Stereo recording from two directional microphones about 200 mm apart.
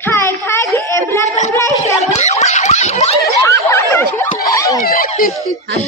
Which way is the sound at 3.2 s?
15° left (ahead or behind).